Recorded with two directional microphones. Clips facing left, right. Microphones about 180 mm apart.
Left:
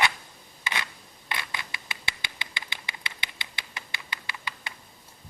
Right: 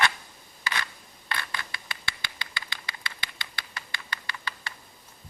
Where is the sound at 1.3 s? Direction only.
20° left (ahead or behind).